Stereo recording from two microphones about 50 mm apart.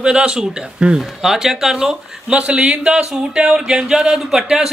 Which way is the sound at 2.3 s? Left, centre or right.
Right.